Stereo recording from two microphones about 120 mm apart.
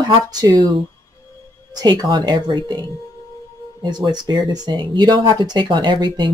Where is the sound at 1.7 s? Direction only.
35° right (ahead or behind).